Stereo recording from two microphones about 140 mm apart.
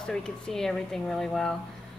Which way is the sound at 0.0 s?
5° left (ahead or behind).